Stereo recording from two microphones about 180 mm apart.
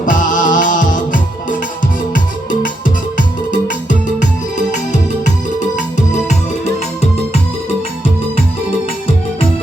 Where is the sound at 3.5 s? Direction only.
45° left (ahead or behind).